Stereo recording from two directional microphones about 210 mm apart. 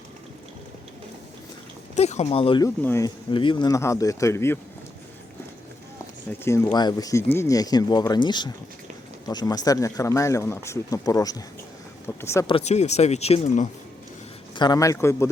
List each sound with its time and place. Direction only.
2.0 s speech: 30° left (ahead or behind)
2.6 s speech: 10° left (ahead or behind)
3.3 s speech: 25° left (ahead or behind)
6.4 s speech: 10° left (ahead or behind)
12.5 s speech: 30° left (ahead or behind)
14.5 s speech: 20° left (ahead or behind)